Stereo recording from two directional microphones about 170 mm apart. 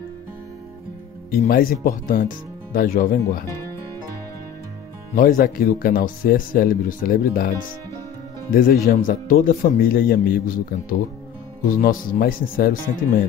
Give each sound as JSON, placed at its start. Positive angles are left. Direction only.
{"t": 1.4, "sound": "speech", "side_deg": 55}
{"t": 5.1, "sound": "speech", "side_deg": 55}